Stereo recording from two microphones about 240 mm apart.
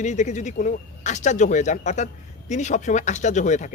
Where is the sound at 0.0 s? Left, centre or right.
Left.